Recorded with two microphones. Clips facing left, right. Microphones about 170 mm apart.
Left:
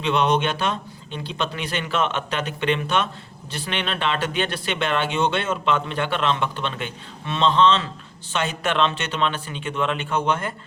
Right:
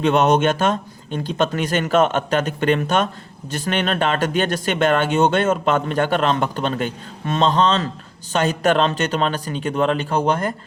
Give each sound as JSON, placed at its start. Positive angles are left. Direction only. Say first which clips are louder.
{"t": 0.0, "sound": "a man's voice", "louder": "right 5 dB", "side_deg": -45}